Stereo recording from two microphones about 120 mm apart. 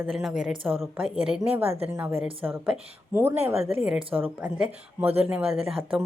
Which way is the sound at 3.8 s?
10° right (ahead or behind).